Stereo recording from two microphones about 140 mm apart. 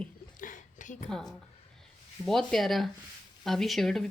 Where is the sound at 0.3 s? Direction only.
65° left (ahead or behind).